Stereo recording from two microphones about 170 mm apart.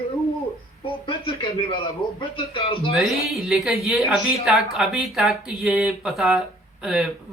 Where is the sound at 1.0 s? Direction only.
30° left (ahead or behind).